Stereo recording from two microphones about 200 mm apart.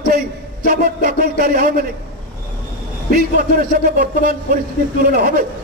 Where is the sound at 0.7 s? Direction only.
45° right (ahead or behind).